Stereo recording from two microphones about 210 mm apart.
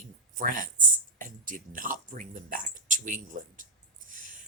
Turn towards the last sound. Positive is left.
turn(degrees=-40)  # may be behind; listen again after turning